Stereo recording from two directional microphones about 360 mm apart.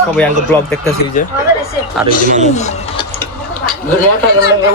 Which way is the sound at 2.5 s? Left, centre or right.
Centre.